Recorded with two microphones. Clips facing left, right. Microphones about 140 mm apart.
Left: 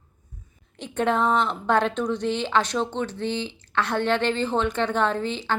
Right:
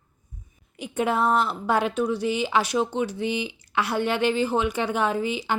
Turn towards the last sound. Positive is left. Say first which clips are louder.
# even
turn(degrees=-10)  # may be behind; listen again after turning